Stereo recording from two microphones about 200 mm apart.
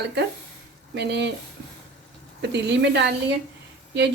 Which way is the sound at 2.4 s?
60° right (ahead or behind).